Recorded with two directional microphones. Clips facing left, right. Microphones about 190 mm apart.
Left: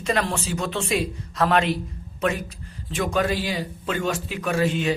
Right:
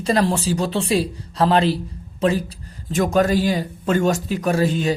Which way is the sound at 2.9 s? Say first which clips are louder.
Right 6 dB; 45° right (ahead or behind).